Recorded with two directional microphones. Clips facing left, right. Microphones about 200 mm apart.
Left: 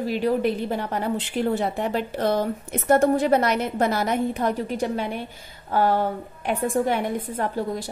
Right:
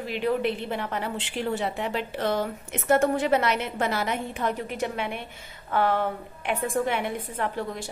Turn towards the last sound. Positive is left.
turn(degrees=35)  # may be behind; listen again after turning